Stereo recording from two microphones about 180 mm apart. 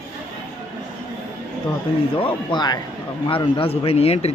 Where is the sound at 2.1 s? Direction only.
30° left (ahead or behind).